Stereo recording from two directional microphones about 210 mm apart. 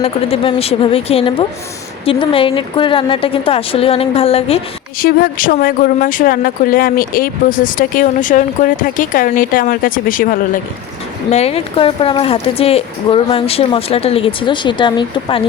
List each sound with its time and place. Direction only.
0.0 s a woman's voice: 30° left (ahead or behind)
4.9 s speech: 45° left (ahead or behind)
11.3 s a woman's voice: 30° left (ahead or behind)